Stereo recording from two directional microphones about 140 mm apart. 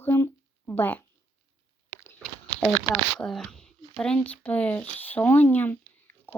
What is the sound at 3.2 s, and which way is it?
Speech, 5° left (ahead or behind).